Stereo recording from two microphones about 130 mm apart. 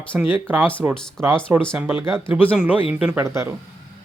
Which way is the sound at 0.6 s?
10° left (ahead or behind).